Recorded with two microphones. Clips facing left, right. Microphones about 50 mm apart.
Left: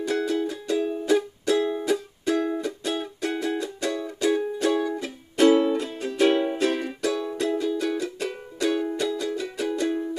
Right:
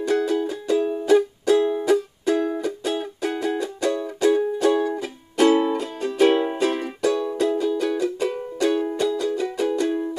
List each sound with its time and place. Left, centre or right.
0.0 s music: centre
6.2 s music: centre